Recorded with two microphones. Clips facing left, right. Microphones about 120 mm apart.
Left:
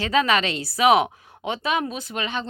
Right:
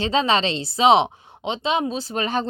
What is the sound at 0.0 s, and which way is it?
Speech, 25° right (ahead or behind).